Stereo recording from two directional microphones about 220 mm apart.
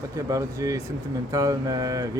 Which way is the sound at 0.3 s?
15° right (ahead or behind).